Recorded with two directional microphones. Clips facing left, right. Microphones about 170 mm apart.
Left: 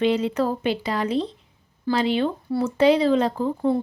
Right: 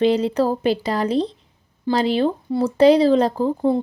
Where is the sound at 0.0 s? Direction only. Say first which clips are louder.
Right 4 dB; 35° right (ahead or behind).